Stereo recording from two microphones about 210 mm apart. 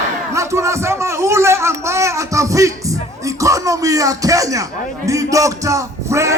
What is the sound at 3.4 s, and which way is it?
Music, 15° right (ahead or behind).